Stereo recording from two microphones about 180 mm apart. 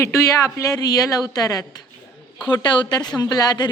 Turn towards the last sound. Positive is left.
turn(degrees=20)  # may be behind; listen again after turning